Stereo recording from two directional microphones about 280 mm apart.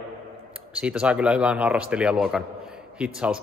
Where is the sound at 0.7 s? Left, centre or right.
Centre.